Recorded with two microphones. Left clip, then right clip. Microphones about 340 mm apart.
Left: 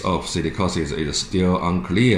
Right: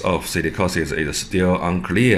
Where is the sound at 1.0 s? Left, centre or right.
Right.